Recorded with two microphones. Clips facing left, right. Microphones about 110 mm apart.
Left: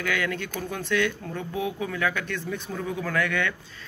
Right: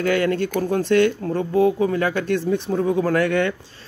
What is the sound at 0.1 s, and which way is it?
Speech, 45° right (ahead or behind).